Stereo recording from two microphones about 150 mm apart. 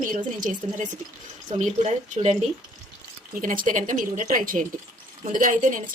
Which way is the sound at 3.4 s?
65° right (ahead or behind).